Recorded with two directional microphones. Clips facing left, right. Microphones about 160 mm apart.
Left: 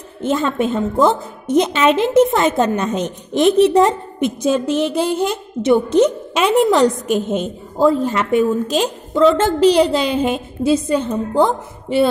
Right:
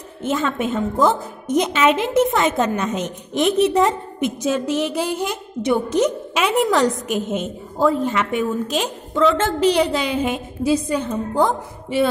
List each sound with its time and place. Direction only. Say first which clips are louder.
0.2 s a woman's voice: left 4 dB; 30° left (ahead or behind)